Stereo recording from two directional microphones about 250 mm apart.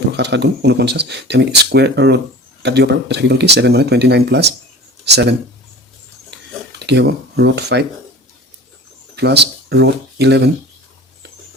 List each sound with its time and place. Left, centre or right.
0.1 s speech: right
6.3 s a sound: right
9.1 s speech: right